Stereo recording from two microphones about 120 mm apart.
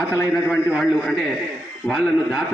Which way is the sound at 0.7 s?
Centre (ahead or behind).